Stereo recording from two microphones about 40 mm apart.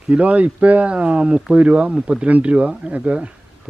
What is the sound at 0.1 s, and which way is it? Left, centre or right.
A man's voice, right.